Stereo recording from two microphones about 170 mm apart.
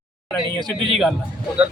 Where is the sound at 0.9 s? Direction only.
Centre (ahead or behind).